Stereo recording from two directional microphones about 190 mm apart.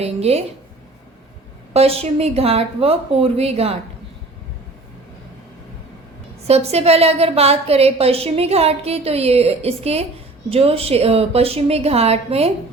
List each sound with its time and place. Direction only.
0.0 s a woman's voice: 35° right (ahead or behind)
1.7 s a woman's voice: 30° right (ahead or behind)
6.5 s a woman's voice: 35° right (ahead or behind)